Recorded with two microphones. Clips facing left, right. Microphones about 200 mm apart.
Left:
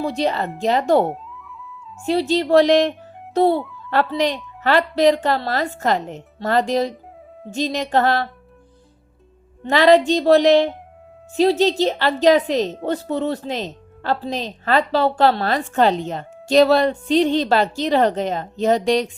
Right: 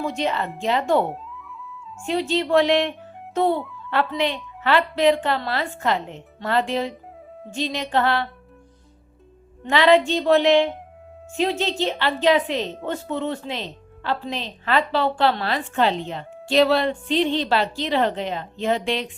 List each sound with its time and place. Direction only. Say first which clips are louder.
0.0 s a woman's voice: left 3 dB; 35° left (ahead or behind)
1.1 s music: left 1 dB; centre (ahead or behind)
2.0 s a woman's voice: left 4 dB; 35° left (ahead or behind)
9.6 s a woman's voice: left 3 dB; 40° left (ahead or behind)